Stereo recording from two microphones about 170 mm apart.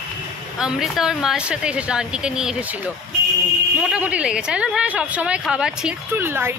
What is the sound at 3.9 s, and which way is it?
A woman's voice, 5° right (ahead or behind).